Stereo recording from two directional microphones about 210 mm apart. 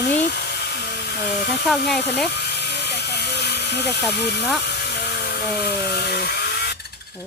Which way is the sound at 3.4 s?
50° left (ahead or behind).